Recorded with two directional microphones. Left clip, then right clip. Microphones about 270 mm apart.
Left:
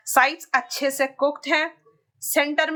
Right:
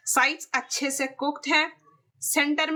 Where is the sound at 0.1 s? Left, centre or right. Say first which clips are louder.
Left 4 dB; centre.